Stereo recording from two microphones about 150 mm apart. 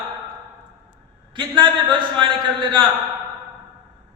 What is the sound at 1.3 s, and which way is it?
Speech, 35° right (ahead or behind).